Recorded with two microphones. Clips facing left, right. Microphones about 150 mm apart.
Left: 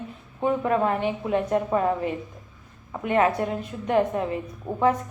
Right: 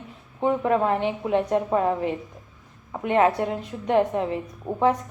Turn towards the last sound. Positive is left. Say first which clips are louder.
# right 1 dB
turn(degrees=0)  # may be behind; listen again after turning